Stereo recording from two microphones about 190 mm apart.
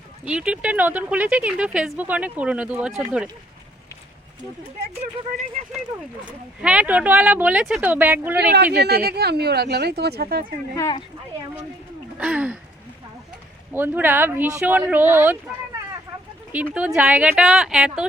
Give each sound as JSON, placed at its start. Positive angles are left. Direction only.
{"t": 0.3, "sound": "speech", "side_deg": -5}
{"t": 6.6, "sound": "speech", "side_deg": -5}
{"t": 8.7, "sound": "speech", "side_deg": -55}
{"t": 10.8, "sound": "speech", "side_deg": 20}
{"t": 12.1, "sound": "gasp", "side_deg": -5}
{"t": 13.7, "sound": "speech", "side_deg": -10}
{"t": 16.7, "sound": "speech", "side_deg": -5}